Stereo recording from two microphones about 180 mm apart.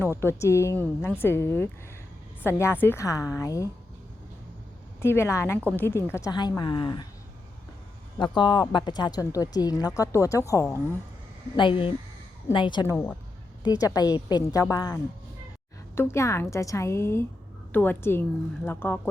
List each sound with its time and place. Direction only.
0.2 s a woman's voice: 15° left (ahead or behind)
4.9 s a woman's voice: 15° left (ahead or behind)
8.2 s a woman's voice: 25° left (ahead or behind)
11.5 s a woman's voice: 30° left (ahead or behind); by 18.9 s 10° left (ahead or behind)